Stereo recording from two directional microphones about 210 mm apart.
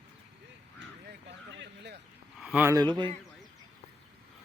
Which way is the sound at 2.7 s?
20° right (ahead or behind).